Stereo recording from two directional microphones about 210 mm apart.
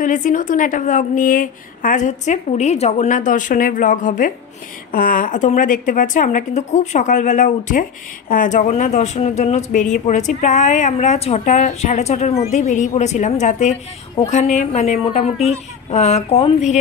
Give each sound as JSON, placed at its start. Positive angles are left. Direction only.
{"t": 0.0, "sound": "a woman's voice", "side_deg": 40}